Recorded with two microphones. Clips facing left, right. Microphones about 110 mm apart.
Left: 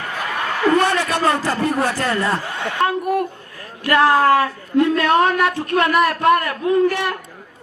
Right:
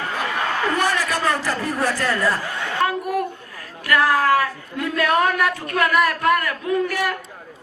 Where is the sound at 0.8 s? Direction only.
25° left (ahead or behind).